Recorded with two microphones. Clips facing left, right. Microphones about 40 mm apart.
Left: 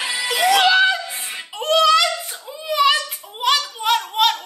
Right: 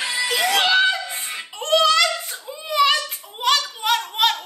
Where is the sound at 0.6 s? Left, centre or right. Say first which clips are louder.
Left 2 dB; centre.